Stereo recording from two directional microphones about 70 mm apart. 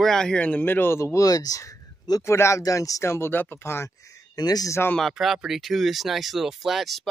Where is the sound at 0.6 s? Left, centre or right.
Left.